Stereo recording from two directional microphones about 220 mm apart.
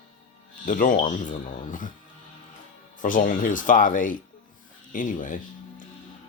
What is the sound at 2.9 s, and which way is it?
Speech, 35° left (ahead or behind).